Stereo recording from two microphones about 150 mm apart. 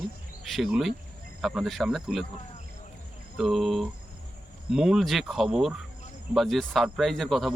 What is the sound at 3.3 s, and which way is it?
Speech, centre (ahead or behind).